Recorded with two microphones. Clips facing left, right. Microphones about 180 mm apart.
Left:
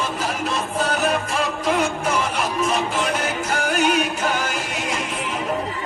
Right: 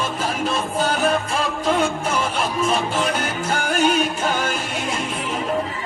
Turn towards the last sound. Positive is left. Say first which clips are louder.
# right 1 dB
turn(degrees=-30)  # may be behind; listen again after turning